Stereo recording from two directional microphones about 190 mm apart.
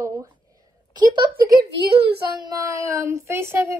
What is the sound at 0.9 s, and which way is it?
A woman's voice, 25° right (ahead or behind).